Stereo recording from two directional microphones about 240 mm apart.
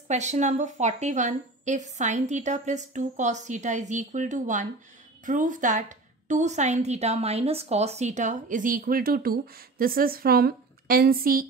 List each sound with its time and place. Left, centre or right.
0.1 s a woman's voice: right